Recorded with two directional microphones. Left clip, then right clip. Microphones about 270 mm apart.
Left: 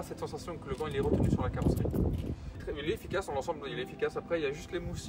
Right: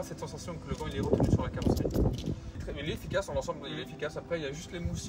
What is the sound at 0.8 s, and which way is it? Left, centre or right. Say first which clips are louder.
A man's voice: right 2 dB; centre.